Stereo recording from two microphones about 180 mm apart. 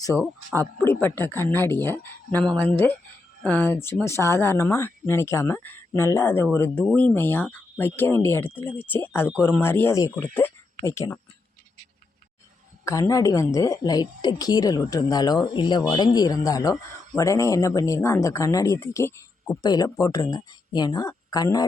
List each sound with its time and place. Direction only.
0.1 s speech: centre (ahead or behind)
0.5 s speech: 10° left (ahead or behind)
12.8 s a woman's voice: 15° left (ahead or behind)